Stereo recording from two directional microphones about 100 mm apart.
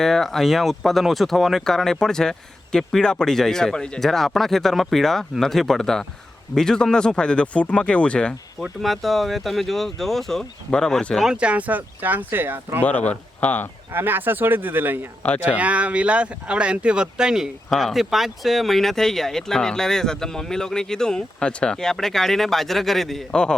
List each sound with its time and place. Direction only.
0.0 s speech: 5° left (ahead or behind)
8.8 s speech: centre (ahead or behind)
11.3 s speech: 10° right (ahead or behind)
12.8 s speech: 15° left (ahead or behind)
13.9 s speech: 20° right (ahead or behind)
15.2 s speech: 15° left (ahead or behind)
15.5 s speech: 15° right (ahead or behind); by 23.6 s 10° left (ahead or behind)